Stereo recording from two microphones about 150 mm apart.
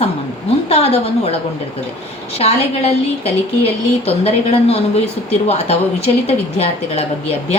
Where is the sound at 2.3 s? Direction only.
45° left (ahead or behind).